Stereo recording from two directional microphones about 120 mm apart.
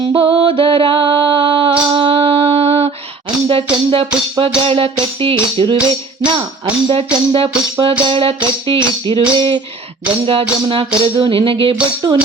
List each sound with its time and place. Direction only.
0.0 s music: 50° right (ahead or behind)
10.7 s music: 45° right (ahead or behind)